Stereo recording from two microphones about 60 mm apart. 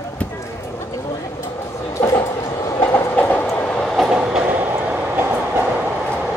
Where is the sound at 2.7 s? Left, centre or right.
Left.